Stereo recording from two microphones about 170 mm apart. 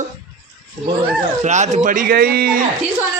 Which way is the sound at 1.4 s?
45° right (ahead or behind).